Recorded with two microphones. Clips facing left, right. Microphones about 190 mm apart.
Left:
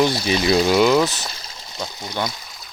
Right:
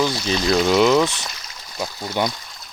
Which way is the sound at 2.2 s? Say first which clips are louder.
Right 3 dB; 15° right (ahead or behind).